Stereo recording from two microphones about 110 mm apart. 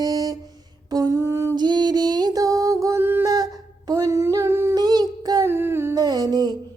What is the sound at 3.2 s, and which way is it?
Humming, 35° right (ahead or behind).